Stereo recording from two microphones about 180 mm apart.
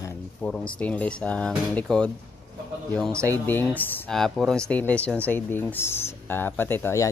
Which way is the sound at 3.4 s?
10° left (ahead or behind).